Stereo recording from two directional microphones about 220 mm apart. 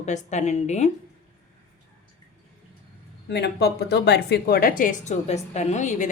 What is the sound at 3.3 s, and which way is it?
A woman's voice, 50° left (ahead or behind).